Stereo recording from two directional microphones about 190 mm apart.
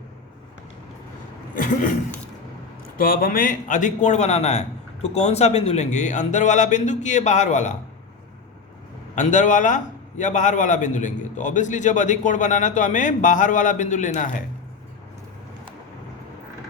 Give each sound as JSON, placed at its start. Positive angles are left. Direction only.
{"t": 1.5, "sound": "a man's voice", "side_deg": 45}
{"t": 9.1, "sound": "a man's voice", "side_deg": 40}